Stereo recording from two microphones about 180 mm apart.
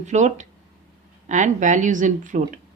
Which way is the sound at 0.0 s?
40° right (ahead or behind).